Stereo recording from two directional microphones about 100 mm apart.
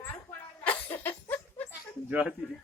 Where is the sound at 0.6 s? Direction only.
15° left (ahead or behind).